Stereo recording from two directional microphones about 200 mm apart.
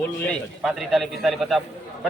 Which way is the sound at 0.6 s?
Centre (ahead or behind).